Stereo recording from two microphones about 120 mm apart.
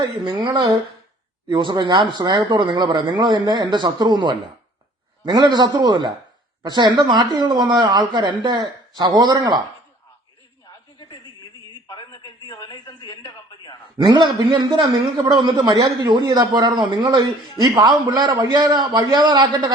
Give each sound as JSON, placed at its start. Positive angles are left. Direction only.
{"t": 0.0, "sound": "a man's voice", "side_deg": -40}
{"t": 11.9, "sound": "a sound", "side_deg": 45}
{"t": 12.5, "sound": "speech", "side_deg": 35}
{"t": 14.0, "sound": "a man's voice", "side_deg": -40}